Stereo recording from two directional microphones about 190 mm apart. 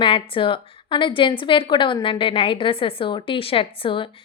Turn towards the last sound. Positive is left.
turn(degrees=25)  # may be behind; listen again after turning